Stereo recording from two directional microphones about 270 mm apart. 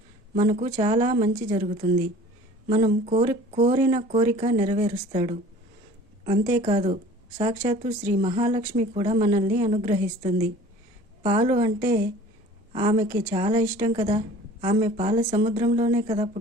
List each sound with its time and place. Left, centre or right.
0.3 s a woman's voice: right
11.2 s speech: right
13.9 s speech: right